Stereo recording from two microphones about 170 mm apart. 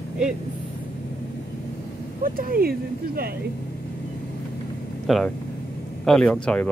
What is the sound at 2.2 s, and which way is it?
Speech, 60° right (ahead or behind).